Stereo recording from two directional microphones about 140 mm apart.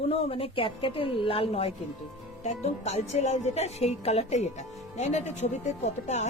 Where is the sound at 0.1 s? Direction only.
40° left (ahead or behind).